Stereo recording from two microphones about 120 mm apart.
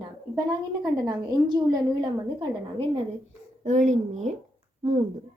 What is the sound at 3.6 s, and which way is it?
Speech, 90° right.